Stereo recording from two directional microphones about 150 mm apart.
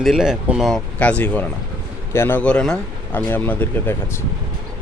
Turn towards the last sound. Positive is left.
turn(degrees=15)  # may be behind; listen again after turning